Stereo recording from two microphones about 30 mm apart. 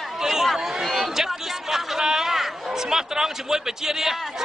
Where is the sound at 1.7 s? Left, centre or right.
Centre.